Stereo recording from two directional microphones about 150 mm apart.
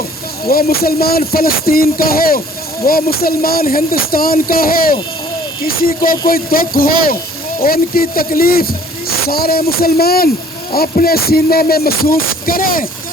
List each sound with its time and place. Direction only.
0.4 s music: 90° left
1.3 s speech: 85° left
10.7 s music: 85° left
11.7 s speech: 90° left; by 12.9 s 70° left (ahead or behind)